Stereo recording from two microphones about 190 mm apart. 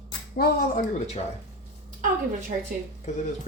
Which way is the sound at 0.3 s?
55° left (ahead or behind).